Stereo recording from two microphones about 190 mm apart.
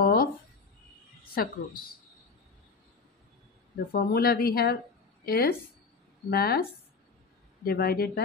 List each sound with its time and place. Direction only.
0.0 s a sound: 50° left (ahead or behind)
1.3 s a woman's voice: 50° left (ahead or behind)
3.9 s a woman's voice: 55° left (ahead or behind)